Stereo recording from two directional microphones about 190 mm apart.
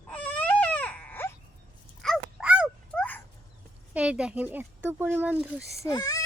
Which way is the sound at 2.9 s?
5° left (ahead or behind).